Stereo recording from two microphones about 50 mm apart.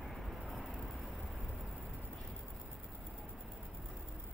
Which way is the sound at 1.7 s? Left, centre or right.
Right.